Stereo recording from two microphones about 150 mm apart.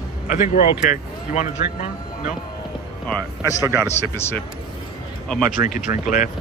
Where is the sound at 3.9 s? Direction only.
15° left (ahead or behind).